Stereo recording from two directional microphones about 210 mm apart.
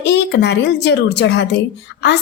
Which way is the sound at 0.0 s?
55° left (ahead or behind).